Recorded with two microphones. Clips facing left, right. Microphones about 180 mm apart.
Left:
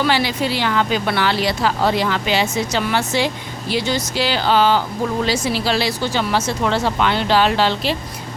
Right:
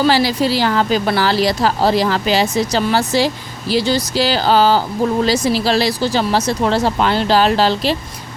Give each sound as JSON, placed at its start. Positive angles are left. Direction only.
{"t": 0.0, "sound": "speech", "side_deg": -35}